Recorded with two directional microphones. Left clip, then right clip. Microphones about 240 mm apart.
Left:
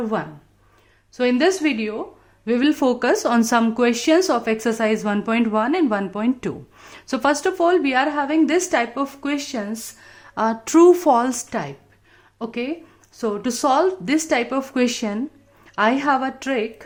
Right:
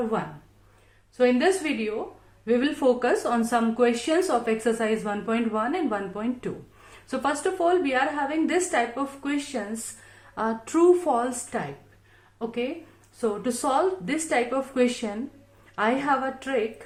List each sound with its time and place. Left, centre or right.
1.1 s speech: left